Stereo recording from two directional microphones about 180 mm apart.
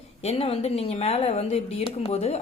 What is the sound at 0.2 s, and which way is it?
Speech, 35° left (ahead or behind).